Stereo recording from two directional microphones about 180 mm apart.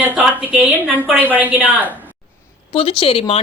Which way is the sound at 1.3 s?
10° right (ahead or behind).